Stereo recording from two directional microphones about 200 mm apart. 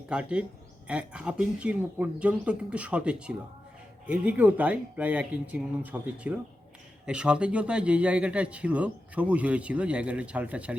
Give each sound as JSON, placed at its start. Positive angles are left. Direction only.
{"t": 0.1, "sound": "speech", "side_deg": -5}